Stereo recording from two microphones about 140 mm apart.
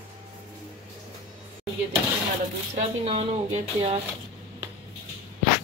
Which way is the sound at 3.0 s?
45° right (ahead or behind).